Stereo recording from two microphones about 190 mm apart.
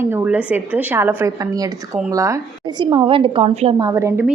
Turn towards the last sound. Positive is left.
turn(degrees=-15)  # may be behind; listen again after turning